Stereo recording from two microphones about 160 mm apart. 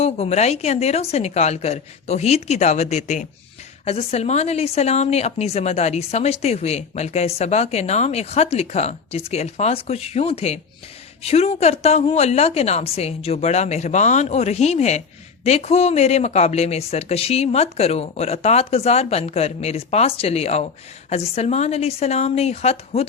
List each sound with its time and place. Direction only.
0.0 s a woman's voice: 40° left (ahead or behind)